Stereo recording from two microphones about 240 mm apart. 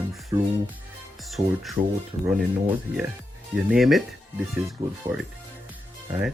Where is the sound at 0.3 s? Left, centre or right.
Centre.